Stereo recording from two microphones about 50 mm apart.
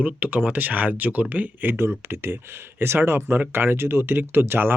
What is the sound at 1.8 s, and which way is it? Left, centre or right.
Speech, right.